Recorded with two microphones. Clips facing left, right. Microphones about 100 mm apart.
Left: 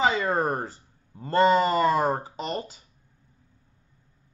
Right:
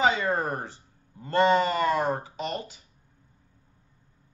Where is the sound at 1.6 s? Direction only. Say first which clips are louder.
Left 3 dB; 35° left (ahead or behind).